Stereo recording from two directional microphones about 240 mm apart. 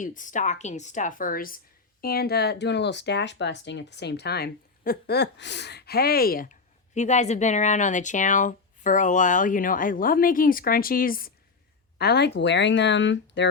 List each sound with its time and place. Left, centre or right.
0.0 s a woman's voice: left